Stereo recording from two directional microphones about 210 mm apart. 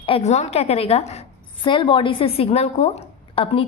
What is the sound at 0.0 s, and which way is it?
A woman's voice, 30° left (ahead or behind).